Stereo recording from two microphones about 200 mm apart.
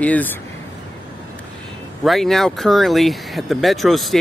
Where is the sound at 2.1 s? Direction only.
Centre (ahead or behind).